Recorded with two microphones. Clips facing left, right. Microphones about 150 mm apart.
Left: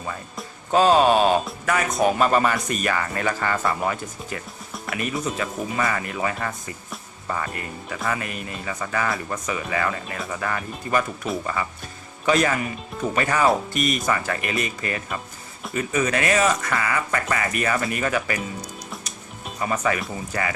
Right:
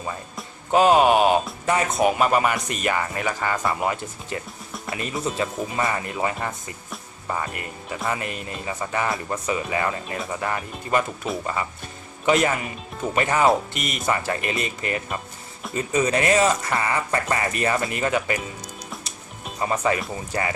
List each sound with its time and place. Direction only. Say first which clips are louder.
0.7 s speech: even; 15° right (ahead or behind)
2.0 s speech: left 1 dB; 10° right (ahead or behind)
19.6 s speech: right 1 dB; 25° right (ahead or behind)